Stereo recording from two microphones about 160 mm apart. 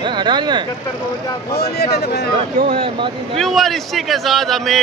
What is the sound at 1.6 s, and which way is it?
Speech, 80° left.